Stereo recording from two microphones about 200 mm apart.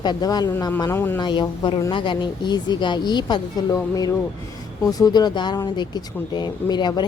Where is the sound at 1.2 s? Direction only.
25° left (ahead or behind).